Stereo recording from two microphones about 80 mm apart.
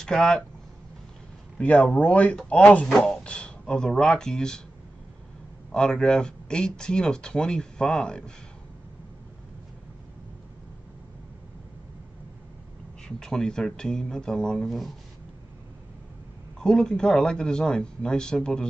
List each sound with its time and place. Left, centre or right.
0.0 s speech: centre
1.6 s speech: centre
5.7 s speech: centre
13.2 s speech: centre
16.5 s speech: centre